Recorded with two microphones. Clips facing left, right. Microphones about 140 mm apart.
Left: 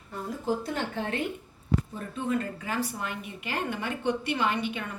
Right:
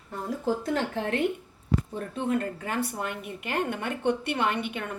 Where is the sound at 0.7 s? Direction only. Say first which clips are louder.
Right 3 dB; 75° right (ahead or behind).